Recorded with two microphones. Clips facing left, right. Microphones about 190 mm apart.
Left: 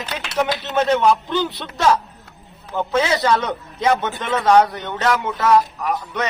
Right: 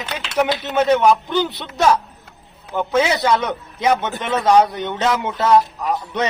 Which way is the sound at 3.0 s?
15° right (ahead or behind).